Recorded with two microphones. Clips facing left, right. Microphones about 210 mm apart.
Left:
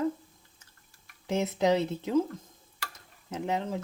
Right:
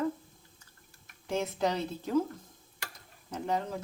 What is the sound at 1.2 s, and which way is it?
Speech, 20° left (ahead or behind).